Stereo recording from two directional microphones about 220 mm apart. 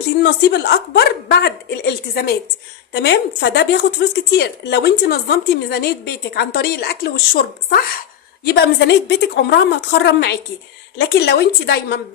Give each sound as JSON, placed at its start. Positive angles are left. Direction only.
{"t": 0.2, "sound": "a woman's voice", "side_deg": 50}